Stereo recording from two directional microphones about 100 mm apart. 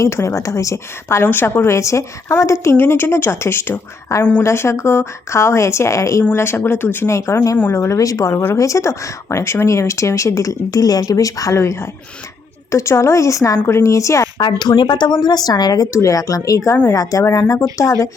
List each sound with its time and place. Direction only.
0.0 s a woman's voice: 30° left (ahead or behind)
14.3 s speech: 45° left (ahead or behind)